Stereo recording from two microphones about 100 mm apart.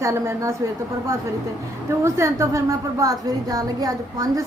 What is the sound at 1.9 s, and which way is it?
Speech, 30° right (ahead or behind).